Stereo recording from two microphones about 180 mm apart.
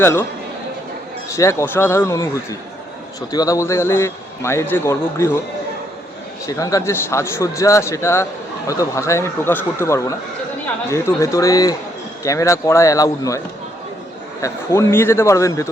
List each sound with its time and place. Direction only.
0.0 s a man's voice: 15° left (ahead or behind)
1.4 s a man's voice: 15° left (ahead or behind)
6.4 s a man's voice: 20° left (ahead or behind)
14.4 s a man's voice: 15° left (ahead or behind)